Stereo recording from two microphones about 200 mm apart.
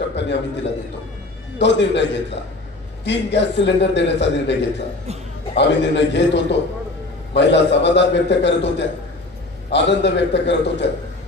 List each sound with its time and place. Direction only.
0.1 s a man's voice: 60° left (ahead or behind)
1.6 s a man's voice: 60° left (ahead or behind)